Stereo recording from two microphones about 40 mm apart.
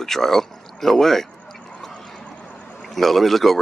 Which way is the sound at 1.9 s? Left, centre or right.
Centre.